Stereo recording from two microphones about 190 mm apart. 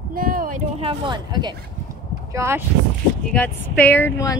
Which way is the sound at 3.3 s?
10° left (ahead or behind).